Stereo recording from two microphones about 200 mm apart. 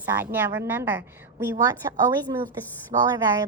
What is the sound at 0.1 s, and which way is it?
A woman's voice, 10° right (ahead or behind).